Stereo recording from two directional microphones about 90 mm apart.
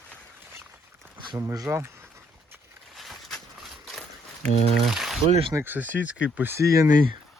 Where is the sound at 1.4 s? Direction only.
45° right (ahead or behind).